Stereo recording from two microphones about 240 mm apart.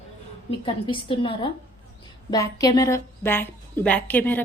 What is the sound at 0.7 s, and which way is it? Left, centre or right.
A woman's voice, centre.